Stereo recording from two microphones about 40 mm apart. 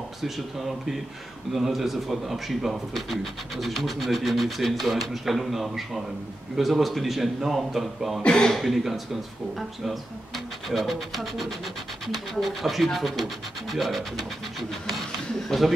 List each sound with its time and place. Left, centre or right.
0.2 s speech: centre
8.2 s speech: left
8.5 s speech: centre